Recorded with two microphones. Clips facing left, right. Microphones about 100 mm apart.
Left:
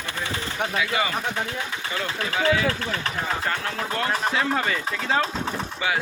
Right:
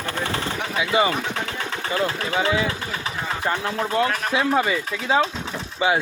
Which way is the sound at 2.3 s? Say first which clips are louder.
Left 1 dB; 25° right (ahead or behind).